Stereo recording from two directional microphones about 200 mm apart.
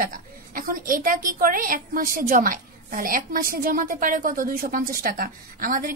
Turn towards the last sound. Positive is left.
turn(degrees=-45)  # may be behind; listen again after turning